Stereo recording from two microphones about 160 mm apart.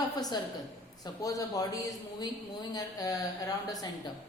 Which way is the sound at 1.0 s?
20° left (ahead or behind).